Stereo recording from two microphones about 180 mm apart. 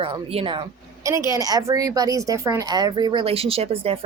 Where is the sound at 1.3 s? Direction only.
20° right (ahead or behind).